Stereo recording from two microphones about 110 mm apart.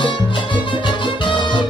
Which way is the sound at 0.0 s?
50° left (ahead or behind).